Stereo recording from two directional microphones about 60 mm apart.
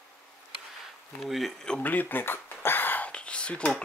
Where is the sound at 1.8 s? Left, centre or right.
Left.